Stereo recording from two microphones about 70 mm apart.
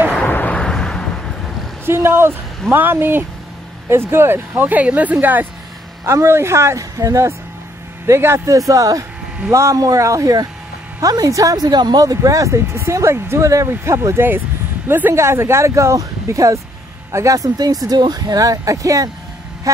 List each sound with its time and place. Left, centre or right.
0.3 s a sound: left
0.6 s a sound: centre
1.9 s speech: right
6.0 s speech: right
8.5 s speech: right
14.9 s speech: right
15.1 s speech: right